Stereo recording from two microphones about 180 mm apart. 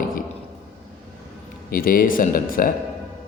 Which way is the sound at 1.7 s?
50° left (ahead or behind).